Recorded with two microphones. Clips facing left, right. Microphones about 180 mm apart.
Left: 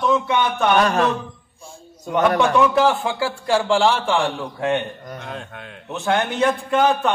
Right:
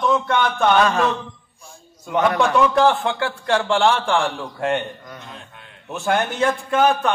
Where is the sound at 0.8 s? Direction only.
40° left (ahead or behind).